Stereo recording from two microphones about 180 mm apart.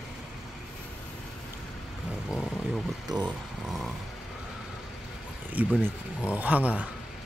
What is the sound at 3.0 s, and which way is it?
Speech, 25° right (ahead or behind).